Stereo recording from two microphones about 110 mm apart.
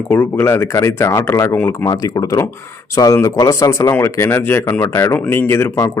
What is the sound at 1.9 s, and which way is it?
Speech, 35° left (ahead or behind).